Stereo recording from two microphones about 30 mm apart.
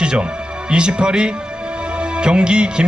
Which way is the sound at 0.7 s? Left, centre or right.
Right.